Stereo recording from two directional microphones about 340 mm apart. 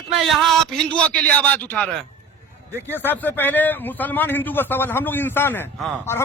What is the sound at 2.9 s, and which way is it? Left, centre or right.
A man's voice, centre.